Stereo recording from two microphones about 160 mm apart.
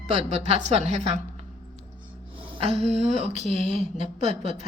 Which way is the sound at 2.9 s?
40° right (ahead or behind).